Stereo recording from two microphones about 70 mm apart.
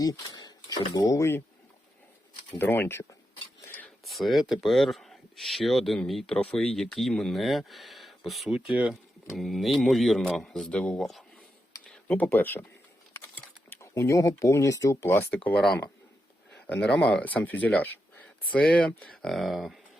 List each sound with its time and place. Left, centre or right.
0.0 s speech: left
1.1 s speech: left
2.6 s speech: left
4.0 s speech: centre
6.2 s a man's voice: centre
12.2 s speech: left
13.7 s speech: left
15.3 s speech: left
16.6 s speech: centre